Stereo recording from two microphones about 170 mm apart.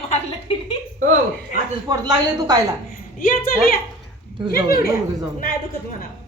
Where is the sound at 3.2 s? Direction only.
60° left (ahead or behind).